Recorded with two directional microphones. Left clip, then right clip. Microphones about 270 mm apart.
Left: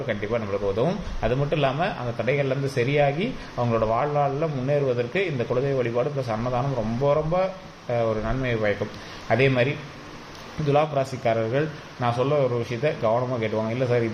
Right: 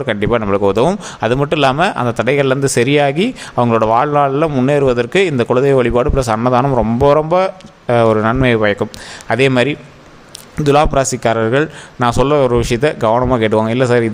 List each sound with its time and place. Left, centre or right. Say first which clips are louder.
0.1 s a man's voice: right 12 dB; right